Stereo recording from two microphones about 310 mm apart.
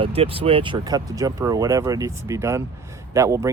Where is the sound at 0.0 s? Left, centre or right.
Centre.